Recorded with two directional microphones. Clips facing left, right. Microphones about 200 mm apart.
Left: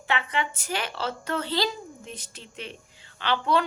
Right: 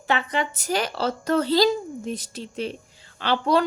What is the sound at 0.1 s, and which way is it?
A woman's voice, 40° right (ahead or behind).